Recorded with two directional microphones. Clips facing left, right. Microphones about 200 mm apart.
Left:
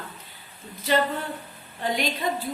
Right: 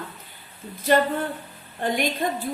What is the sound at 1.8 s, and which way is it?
Speech, 50° right (ahead or behind).